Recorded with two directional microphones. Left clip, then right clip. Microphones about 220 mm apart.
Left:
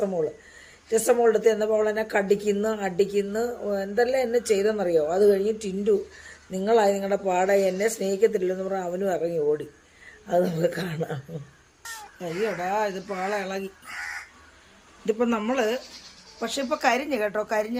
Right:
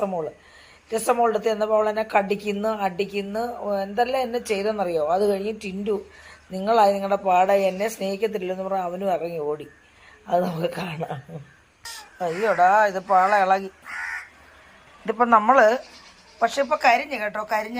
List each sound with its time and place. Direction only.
0.9 s a woman's voice: 10° left (ahead or behind)
11.8 s crow: centre (ahead or behind)
12.2 s speech: 30° right (ahead or behind)
12.7 s speech: centre (ahead or behind)
15.0 s a woman's voice: 10° left (ahead or behind)
16.4 s a woman's voice: 5° left (ahead or behind)